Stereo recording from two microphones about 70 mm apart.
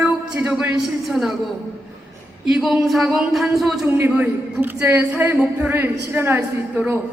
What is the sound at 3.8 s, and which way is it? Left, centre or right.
Speech, right.